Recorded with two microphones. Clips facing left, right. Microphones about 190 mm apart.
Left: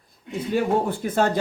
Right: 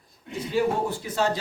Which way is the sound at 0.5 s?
55° left (ahead or behind).